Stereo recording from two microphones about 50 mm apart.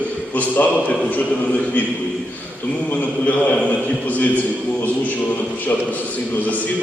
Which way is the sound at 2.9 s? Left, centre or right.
Left.